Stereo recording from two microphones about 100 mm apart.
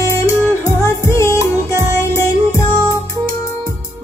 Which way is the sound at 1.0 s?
30° left (ahead or behind).